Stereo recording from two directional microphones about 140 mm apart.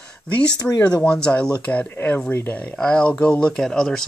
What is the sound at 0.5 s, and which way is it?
Speech, 30° left (ahead or behind).